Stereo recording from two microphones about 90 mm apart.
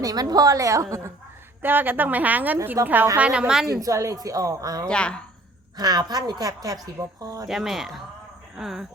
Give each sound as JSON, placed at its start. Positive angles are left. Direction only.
{"t": 0.0, "sound": "a woman's voice", "side_deg": -45}
{"t": 1.6, "sound": "a woman's voice", "side_deg": -20}
{"t": 3.7, "sound": "a woman's voice", "side_deg": -40}
{"t": 4.9, "sound": "a woman's voice", "side_deg": 10}
{"t": 5.7, "sound": "a woman's voice", "side_deg": -50}
{"t": 7.4, "sound": "speech", "side_deg": -5}